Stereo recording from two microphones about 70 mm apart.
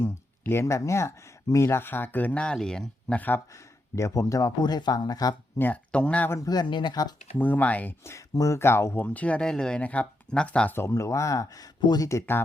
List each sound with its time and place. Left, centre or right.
0.0 s speech: left; by 3.2 s centre
3.2 s speech: left
3.5 s speech: left
4.6 s speech: left
5.5 s speech: left
6.4 s speech: left
7.3 s speech: left
8.0 s speech: left
9.0 s speech: left
10.8 s speech: left